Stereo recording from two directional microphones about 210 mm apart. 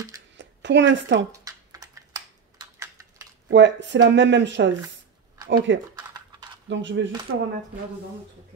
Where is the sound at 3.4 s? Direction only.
60° right (ahead or behind).